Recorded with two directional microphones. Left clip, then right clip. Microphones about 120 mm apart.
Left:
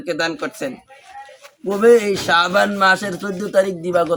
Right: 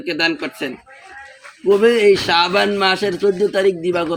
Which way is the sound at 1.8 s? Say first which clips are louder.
Left 2 dB; 25° left (ahead or behind).